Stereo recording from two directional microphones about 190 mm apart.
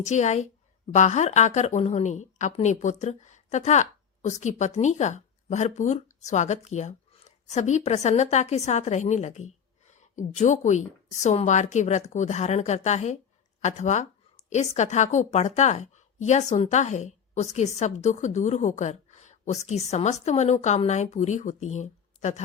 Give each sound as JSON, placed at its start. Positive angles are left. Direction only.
{"t": 0.0, "sound": "a woman's voice", "side_deg": 35}